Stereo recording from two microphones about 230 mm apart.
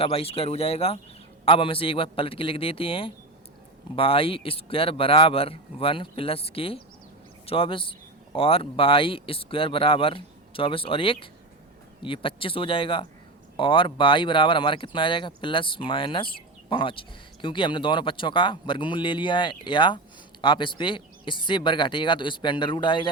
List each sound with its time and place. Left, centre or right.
0.0 s speech: left